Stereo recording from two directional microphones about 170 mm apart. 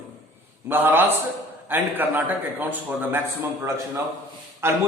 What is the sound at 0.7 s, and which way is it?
A man's voice, 10° right (ahead or behind).